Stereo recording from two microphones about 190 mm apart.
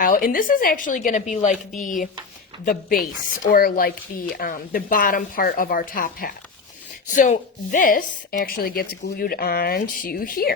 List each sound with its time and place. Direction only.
0.0 s speech: 45° left (ahead or behind)